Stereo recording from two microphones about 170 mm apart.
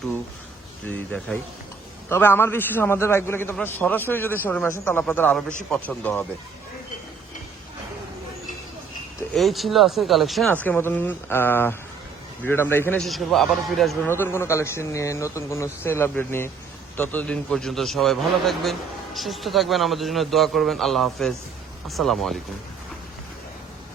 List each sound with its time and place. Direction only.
0.9 s speech: 10° left (ahead or behind)
9.3 s a man's voice: centre (ahead or behind)
13.0 s a man's voice: centre (ahead or behind)
14.1 s a man's voice: 15° left (ahead or behind)